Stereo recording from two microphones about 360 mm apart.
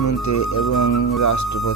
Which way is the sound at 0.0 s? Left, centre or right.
Left.